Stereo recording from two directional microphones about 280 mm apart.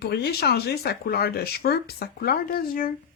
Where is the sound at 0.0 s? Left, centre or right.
Left.